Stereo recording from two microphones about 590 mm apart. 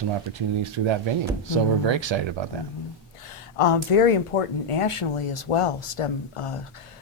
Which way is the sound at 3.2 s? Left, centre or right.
Left.